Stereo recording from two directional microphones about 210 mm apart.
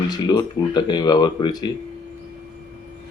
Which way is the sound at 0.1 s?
20° left (ahead or behind).